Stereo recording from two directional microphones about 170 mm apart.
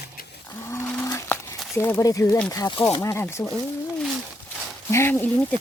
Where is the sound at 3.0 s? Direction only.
15° left (ahead or behind).